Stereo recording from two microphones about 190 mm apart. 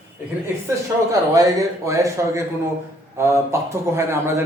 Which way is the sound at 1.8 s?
15° right (ahead or behind).